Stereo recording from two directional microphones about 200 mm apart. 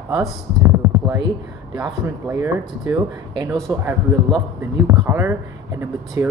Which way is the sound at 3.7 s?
10° right (ahead or behind).